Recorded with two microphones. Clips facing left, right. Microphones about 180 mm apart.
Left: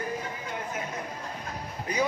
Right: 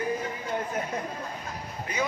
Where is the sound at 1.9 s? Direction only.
40° left (ahead or behind).